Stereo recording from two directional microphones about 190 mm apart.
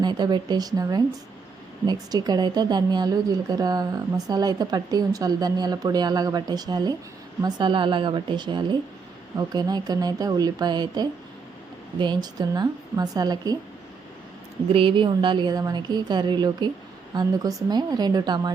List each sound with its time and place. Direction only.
0.0 s a woman's voice: 20° right (ahead or behind)
14.7 s a woman's voice: 30° right (ahead or behind)